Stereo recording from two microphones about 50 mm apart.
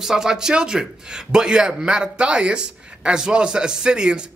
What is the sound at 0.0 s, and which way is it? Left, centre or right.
A man's voice, centre.